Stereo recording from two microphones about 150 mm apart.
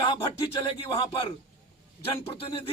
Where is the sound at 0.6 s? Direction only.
35° left (ahead or behind).